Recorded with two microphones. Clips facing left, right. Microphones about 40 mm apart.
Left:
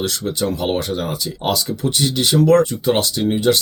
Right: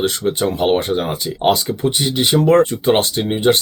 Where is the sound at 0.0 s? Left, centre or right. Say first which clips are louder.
Right 4 dB; right.